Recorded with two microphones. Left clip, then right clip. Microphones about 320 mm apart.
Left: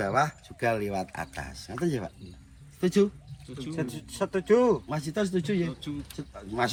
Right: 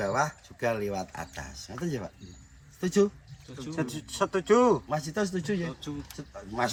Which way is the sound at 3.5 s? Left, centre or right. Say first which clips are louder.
Even; right.